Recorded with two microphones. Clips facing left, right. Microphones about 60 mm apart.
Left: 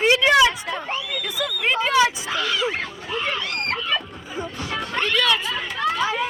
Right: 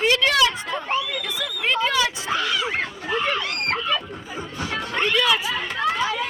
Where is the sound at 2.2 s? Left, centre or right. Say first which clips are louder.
Even; right.